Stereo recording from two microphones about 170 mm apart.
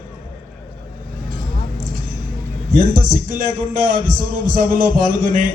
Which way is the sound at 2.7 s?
55° right (ahead or behind).